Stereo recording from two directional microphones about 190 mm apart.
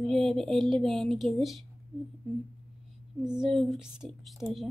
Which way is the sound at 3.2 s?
5° right (ahead or behind).